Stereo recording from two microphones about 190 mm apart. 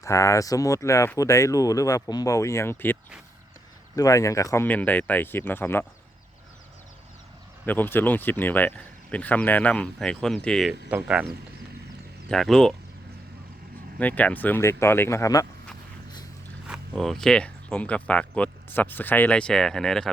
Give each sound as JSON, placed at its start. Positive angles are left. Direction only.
{"t": 0.0, "sound": "speech", "side_deg": 15}
{"t": 7.6, "sound": "speech", "side_deg": 10}
{"t": 12.3, "sound": "speech", "side_deg": 5}
{"t": 14.0, "sound": "speech", "side_deg": 10}
{"t": 16.6, "sound": "speech", "side_deg": -5}